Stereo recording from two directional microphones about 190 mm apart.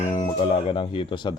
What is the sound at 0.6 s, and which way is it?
Speech, 30° left (ahead or behind).